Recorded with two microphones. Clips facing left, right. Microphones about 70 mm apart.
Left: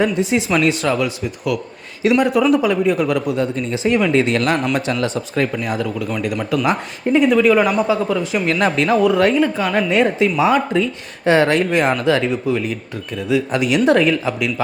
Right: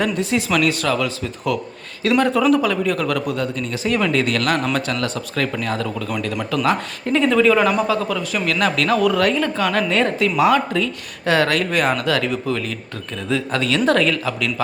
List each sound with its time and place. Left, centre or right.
0.0 s speech: centre
1.5 s speech: centre
8.1 s speech: left